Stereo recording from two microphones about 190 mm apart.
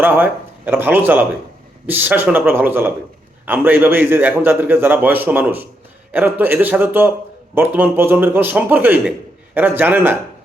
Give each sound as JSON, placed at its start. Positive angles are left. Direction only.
{"t": 0.0, "sound": "a man's voice", "side_deg": -10}